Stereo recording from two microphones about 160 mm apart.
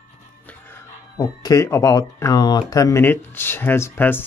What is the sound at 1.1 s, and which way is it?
Speech, 25° left (ahead or behind).